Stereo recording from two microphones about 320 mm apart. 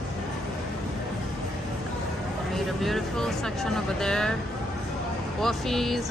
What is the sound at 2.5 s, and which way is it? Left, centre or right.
Speech, centre.